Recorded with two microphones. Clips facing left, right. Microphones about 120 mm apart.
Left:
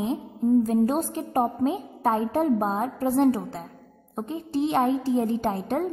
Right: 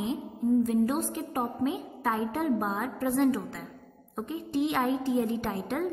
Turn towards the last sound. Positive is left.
turn(degrees=35)  # may be behind; listen again after turning